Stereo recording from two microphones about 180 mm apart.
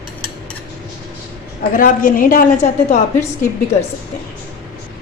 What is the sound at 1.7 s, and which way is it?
A woman's voice, 50° left (ahead or behind).